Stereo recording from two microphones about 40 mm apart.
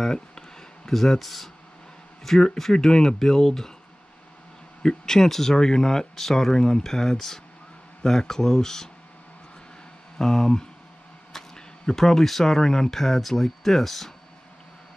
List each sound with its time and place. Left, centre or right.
0.0 s a sound: centre
2.2 s speech: centre
4.8 s speech: centre
10.1 s speech: centre